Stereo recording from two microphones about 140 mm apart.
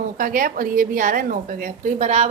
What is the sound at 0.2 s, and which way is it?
A woman's voice, 80° right.